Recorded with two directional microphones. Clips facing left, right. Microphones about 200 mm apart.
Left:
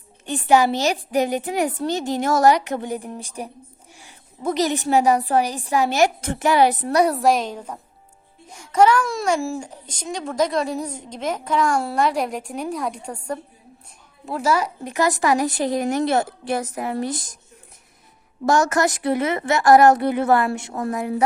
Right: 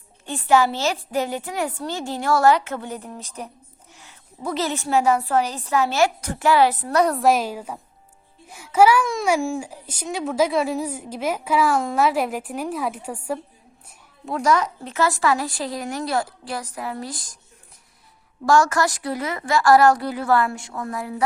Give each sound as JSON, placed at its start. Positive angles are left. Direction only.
{"t": 0.3, "sound": "a woman's voice", "side_deg": 15}
{"t": 7.2, "sound": "a child's voice", "side_deg": -5}
{"t": 14.3, "sound": "speech", "side_deg": 5}
{"t": 18.4, "sound": "speech", "side_deg": 20}